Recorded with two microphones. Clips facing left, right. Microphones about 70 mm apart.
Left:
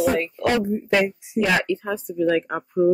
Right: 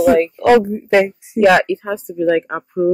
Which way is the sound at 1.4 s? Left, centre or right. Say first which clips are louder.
Right 10 dB; right.